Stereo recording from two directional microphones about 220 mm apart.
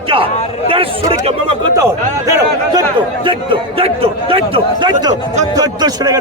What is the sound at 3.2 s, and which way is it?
A man's voice, 25° right (ahead or behind).